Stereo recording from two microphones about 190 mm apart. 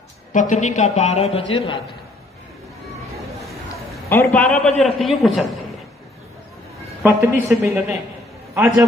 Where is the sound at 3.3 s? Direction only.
Centre (ahead or behind).